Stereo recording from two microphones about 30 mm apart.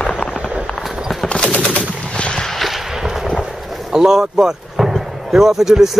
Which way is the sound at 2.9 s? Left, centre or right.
Centre.